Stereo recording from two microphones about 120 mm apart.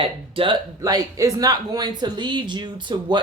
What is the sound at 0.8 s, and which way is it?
Speech, 30° right (ahead or behind).